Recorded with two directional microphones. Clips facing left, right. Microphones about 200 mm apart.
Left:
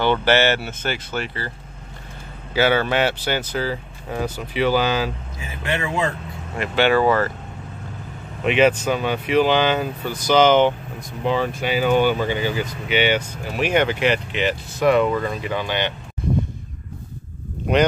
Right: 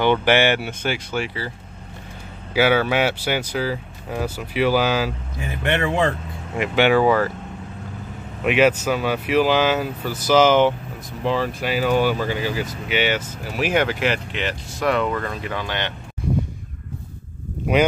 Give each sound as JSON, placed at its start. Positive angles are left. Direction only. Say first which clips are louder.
{"t": 0.0, "sound": "speech", "louder": "right 1 dB", "side_deg": -15}
{"t": 2.5, "sound": "speech", "louder": "right 1 dB", "side_deg": -10}
{"t": 5.7, "sound": "speech", "louder": "right 3 dB", "side_deg": -60}
{"t": 6.5, "sound": "speech", "louder": "right 1 dB", "side_deg": -15}
{"t": 8.5, "sound": "speech", "louder": "even", "side_deg": -5}